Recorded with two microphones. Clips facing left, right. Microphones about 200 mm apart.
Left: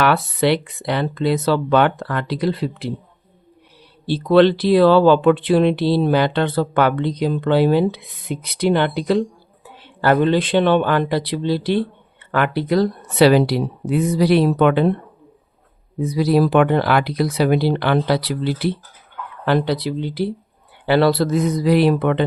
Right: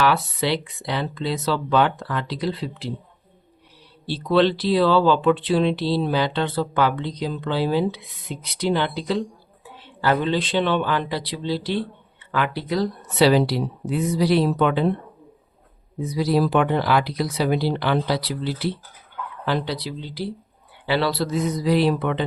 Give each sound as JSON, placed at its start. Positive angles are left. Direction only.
{"t": 0.0, "sound": "speech", "side_deg": 60}
{"t": 4.0, "sound": "speech", "side_deg": 55}
{"t": 16.0, "sound": "speech", "side_deg": 60}